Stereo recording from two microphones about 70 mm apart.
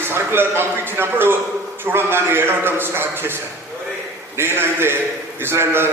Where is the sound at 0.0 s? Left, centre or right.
Right.